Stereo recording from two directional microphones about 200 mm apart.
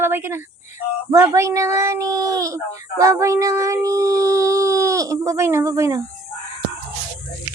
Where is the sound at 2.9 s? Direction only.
15° right (ahead or behind).